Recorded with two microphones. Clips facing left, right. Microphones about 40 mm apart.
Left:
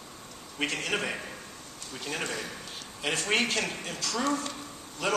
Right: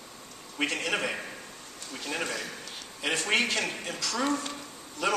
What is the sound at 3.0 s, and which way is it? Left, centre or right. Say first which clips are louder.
Speech: right 1 dB; right.